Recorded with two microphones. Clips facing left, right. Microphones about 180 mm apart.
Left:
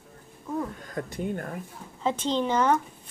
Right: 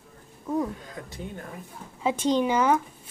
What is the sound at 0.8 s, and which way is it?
Speech, 50° left (ahead or behind).